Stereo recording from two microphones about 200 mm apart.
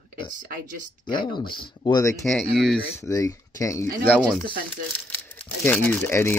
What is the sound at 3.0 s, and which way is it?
Speech, 15° left (ahead or behind).